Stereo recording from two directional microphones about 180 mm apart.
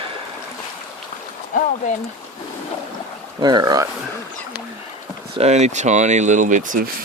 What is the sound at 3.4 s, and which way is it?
Speech, 25° right (ahead or behind).